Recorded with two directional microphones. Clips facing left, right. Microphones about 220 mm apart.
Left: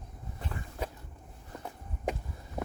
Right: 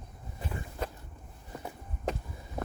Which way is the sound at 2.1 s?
15° left (ahead or behind).